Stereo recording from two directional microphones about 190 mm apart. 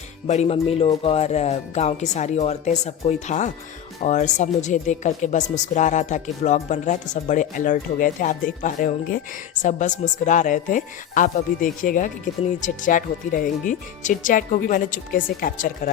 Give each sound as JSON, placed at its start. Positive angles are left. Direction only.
{"t": 0.3, "sound": "a woman's voice", "side_deg": 35}